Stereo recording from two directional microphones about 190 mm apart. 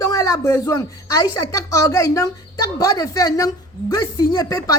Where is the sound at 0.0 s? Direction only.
20° left (ahead or behind).